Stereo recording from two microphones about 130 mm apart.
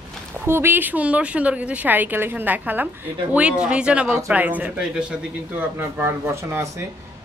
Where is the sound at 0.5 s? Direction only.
15° right (ahead or behind).